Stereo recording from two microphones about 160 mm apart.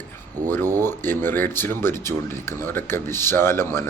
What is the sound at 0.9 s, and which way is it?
Speech, 15° left (ahead or behind).